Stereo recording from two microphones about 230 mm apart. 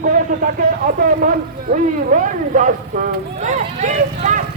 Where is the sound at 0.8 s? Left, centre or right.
Right.